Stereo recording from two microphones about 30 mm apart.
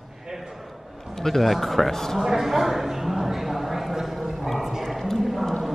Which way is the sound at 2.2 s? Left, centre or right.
Centre.